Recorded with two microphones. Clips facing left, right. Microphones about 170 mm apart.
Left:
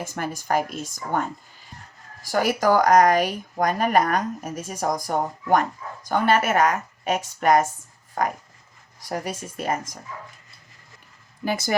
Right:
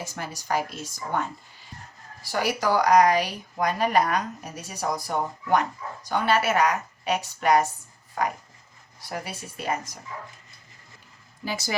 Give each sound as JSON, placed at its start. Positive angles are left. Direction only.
{"t": 0.0, "sound": "speech", "side_deg": 50}
{"t": 2.2, "sound": "speech", "side_deg": 45}
{"t": 11.4, "sound": "speech", "side_deg": 50}